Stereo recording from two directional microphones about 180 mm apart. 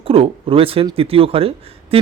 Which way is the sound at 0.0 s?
30° right (ahead or behind).